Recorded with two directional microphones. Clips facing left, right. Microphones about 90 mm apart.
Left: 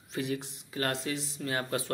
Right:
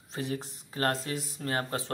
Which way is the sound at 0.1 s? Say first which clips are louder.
Left 1 dB; 35° right (ahead or behind).